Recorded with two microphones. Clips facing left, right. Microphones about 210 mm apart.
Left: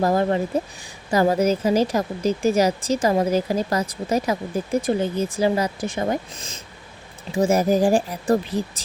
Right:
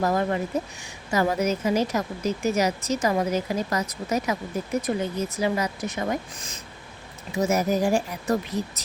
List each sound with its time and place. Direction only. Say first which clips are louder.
0.0 s a woman's voice: left 4 dB; 30° left (ahead or behind)